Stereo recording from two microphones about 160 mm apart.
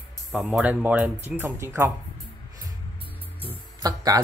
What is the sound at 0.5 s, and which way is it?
Speech, 10° right (ahead or behind).